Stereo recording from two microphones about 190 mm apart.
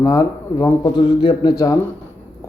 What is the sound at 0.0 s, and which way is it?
Speech, 15° left (ahead or behind).